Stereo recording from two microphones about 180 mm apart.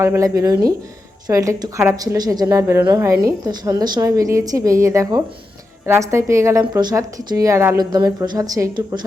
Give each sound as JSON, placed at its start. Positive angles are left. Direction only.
{"t": 0.0, "sound": "a woman's voice", "side_deg": -15}